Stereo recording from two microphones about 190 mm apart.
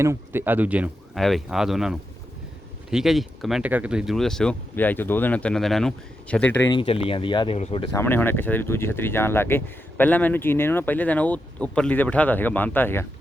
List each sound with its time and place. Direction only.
0.0 s speech: 15° right (ahead or behind); by 6.7 s 10° left (ahead or behind)
6.7 s speech: 25° left (ahead or behind)
7.9 s speech: 10° left (ahead or behind)